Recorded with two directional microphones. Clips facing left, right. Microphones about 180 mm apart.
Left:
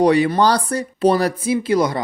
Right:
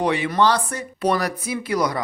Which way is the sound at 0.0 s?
35° left (ahead or behind).